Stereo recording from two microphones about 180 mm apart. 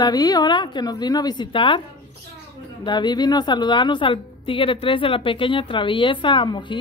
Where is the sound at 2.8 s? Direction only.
25° left (ahead or behind).